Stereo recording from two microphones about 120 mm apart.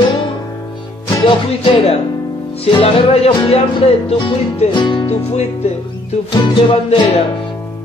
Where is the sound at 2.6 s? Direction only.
55° left (ahead or behind).